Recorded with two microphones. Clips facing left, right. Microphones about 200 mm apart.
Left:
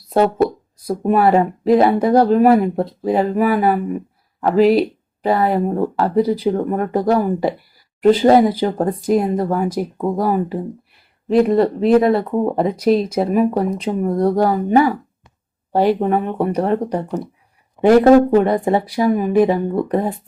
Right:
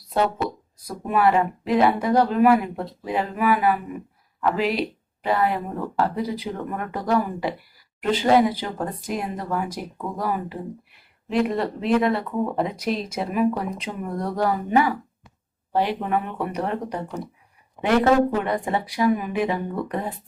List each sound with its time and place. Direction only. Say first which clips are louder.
0.9 s speech: left 6 dB; 35° left (ahead or behind)